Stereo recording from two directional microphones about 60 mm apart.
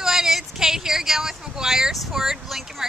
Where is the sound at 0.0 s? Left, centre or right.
Centre.